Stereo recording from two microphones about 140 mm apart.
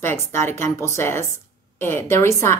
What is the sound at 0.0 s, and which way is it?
Speech, 20° left (ahead or behind).